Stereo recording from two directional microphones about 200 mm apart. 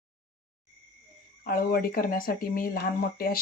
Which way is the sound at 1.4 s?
45° left (ahead or behind).